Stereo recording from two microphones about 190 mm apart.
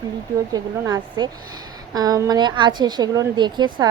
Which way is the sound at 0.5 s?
20° right (ahead or behind).